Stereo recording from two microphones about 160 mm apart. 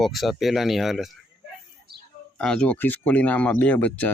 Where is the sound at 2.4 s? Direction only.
5° left (ahead or behind).